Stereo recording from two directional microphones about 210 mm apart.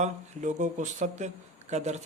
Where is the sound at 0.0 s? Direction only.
35° right (ahead or behind).